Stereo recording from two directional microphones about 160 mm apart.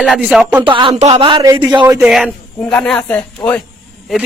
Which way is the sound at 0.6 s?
30° right (ahead or behind).